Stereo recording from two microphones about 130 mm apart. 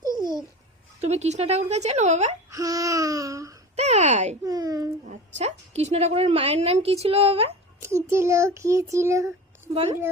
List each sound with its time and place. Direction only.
0.2 s babbling: 30° right (ahead or behind)
1.0 s speech: 55° right (ahead or behind)
2.5 s child singing: 25° right (ahead or behind)
3.8 s speech: 60° right (ahead or behind)
4.4 s child singing: 30° right (ahead or behind)
5.0 s a woman's voice: 55° right (ahead or behind)
7.8 s child singing: 20° right (ahead or behind)